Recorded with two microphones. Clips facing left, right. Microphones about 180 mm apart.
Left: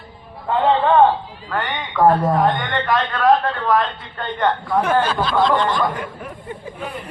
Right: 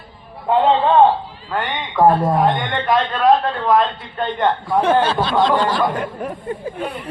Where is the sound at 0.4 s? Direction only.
20° right (ahead or behind).